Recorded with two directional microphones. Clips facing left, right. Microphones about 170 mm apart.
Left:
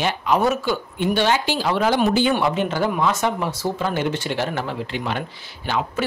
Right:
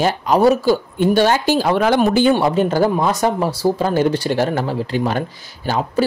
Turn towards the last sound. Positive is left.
turn(degrees=-40)  # may be behind; listen again after turning